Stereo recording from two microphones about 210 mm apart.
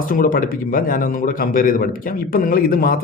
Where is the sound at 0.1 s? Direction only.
40° left (ahead or behind).